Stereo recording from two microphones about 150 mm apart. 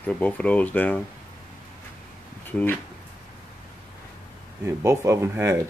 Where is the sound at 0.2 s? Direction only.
10° left (ahead or behind).